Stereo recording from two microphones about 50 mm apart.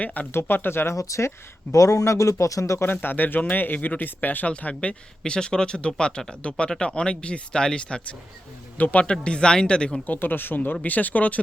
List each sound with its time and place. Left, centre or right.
0.0 s speech: left
0.3 s speech: left
1.0 s speech: left
2.8 s speech: left
4.7 s speech: left
8.8 s speech: left
9.2 s speech: centre
10.1 s speech: left